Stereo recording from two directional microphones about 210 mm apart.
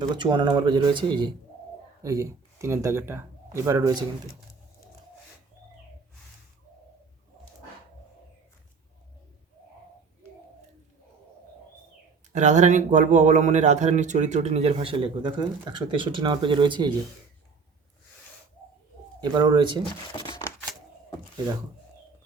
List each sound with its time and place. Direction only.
0.0 s speech: 20° right (ahead or behind)
12.3 s speech: 35° right (ahead or behind)
19.2 s speech: 20° right (ahead or behind)
20.1 s a sound: 20° left (ahead or behind)